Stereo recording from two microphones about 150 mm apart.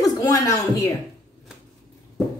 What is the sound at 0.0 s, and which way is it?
Speech, 25° left (ahead or behind).